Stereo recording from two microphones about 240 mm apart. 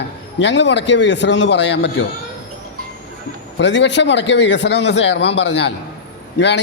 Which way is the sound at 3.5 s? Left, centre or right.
Left.